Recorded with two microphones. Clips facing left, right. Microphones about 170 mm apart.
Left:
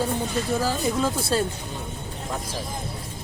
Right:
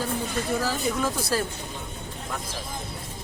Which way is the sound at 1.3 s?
25° left (ahead or behind).